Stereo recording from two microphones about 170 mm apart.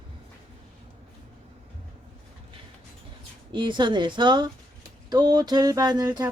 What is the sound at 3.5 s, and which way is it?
Speech, 30° right (ahead or behind).